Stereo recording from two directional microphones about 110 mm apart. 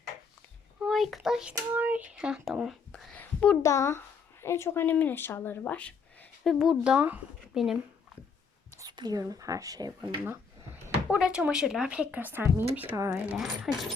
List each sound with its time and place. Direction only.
0.8 s a child's voice: centre (ahead or behind)
1.7 s a child's voice: 15° right (ahead or behind); by 3.6 s 15° left (ahead or behind)
3.6 s speech: 25° left (ahead or behind)
6.4 s speech: centre (ahead or behind)
8.9 s speech: 40° right (ahead or behind)
11.1 s speech: 10° right (ahead or behind)
13.3 s speech: centre (ahead or behind)